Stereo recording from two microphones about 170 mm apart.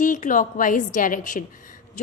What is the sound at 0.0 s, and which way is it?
A woman's voice, 50° left (ahead or behind).